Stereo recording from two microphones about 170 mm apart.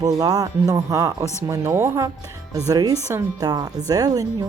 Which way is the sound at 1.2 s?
15° left (ahead or behind).